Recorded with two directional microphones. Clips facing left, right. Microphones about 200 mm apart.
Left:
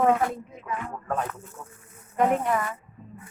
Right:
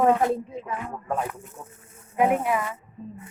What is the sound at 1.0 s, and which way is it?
Speech, 10° right (ahead or behind).